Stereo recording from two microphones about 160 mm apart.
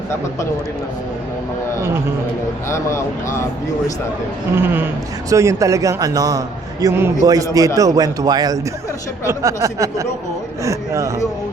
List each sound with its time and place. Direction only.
2.6 s speech: 15° left (ahead or behind)
4.5 s a man's voice: 15° right (ahead or behind)